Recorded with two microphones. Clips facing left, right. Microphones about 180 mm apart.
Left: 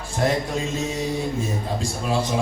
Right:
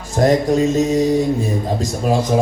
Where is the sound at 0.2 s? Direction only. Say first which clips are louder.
Right 9 dB; 40° right (ahead or behind).